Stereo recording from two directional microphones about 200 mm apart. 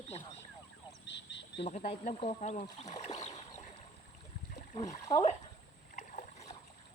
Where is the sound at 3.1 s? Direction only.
35° left (ahead or behind).